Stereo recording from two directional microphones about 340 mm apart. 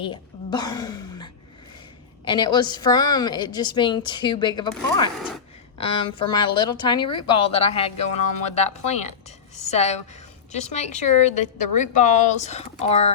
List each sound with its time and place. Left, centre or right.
0.0 s a woman's voice: centre